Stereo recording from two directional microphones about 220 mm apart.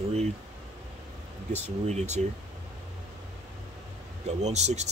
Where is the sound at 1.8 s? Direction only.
30° right (ahead or behind).